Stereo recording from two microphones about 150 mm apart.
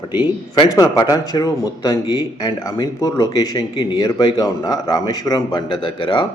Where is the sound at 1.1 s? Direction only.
25° left (ahead or behind).